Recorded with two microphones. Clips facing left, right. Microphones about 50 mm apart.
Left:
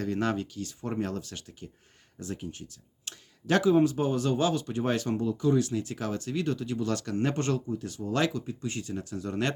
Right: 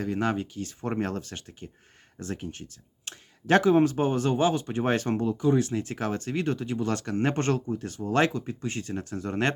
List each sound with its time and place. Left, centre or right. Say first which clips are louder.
0.0 s speech: right 1 dB; centre
0.6 s speech: right 3 dB; right
3.1 s speech: right 4 dB; right